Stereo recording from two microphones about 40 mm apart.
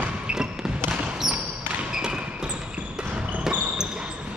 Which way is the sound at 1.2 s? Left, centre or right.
Centre.